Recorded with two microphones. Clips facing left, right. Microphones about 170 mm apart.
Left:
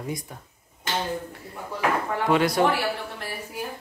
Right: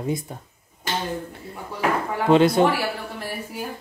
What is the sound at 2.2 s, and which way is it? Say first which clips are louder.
Speech: right 6 dB; 25° right (ahead or behind).